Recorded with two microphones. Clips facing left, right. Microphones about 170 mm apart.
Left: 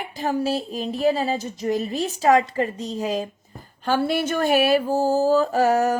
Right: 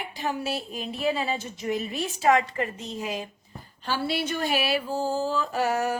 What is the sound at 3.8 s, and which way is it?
Mantra, 50° left (ahead or behind).